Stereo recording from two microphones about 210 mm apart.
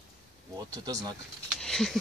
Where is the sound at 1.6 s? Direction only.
Centre (ahead or behind).